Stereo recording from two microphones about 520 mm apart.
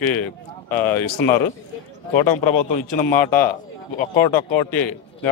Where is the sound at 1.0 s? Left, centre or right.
Left.